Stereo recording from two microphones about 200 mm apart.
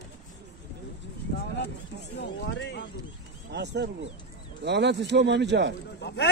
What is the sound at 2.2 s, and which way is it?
Speech, 60° left (ahead or behind).